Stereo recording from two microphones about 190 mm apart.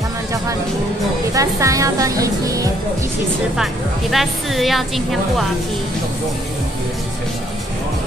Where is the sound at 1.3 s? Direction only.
15° right (ahead or behind).